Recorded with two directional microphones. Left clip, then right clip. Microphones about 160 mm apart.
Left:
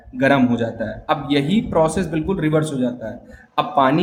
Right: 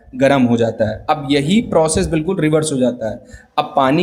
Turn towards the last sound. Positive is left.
turn(degrees=-40)  # may be behind; listen again after turning